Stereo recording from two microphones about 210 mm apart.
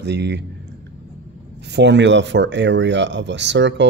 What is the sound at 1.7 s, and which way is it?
Speech, 55° right (ahead or behind).